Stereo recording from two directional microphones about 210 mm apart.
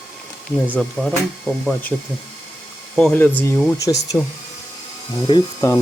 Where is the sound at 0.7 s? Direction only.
5° left (ahead or behind).